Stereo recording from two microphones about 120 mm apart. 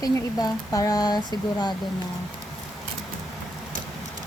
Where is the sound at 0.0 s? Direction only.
30° left (ahead or behind).